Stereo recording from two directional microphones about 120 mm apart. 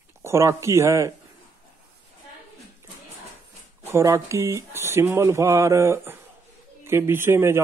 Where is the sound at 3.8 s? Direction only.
25° right (ahead or behind).